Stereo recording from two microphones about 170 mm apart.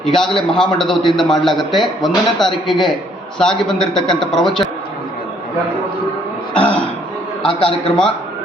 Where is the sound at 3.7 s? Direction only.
5° left (ahead or behind).